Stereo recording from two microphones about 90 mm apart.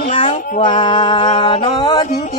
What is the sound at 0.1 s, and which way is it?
Female singing, 80° left.